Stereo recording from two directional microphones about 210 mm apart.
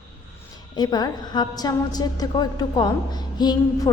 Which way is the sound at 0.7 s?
20° left (ahead or behind).